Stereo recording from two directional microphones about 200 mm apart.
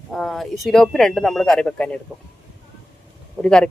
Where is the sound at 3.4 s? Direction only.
5° left (ahead or behind).